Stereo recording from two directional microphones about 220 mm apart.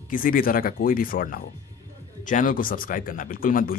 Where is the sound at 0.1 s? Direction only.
40° left (ahead or behind).